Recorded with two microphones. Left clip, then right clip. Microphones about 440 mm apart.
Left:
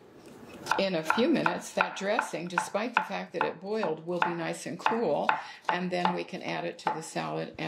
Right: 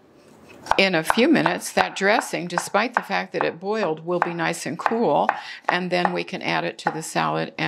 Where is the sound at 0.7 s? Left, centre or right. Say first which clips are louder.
Right 9 dB; right.